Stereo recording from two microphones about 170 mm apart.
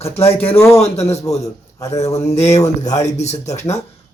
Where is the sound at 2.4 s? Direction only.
40° left (ahead or behind).